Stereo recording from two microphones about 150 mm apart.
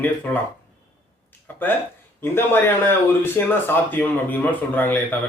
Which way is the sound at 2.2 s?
15° left (ahead or behind).